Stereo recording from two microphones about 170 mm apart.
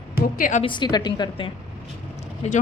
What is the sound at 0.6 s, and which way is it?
Speech, 25° left (ahead or behind).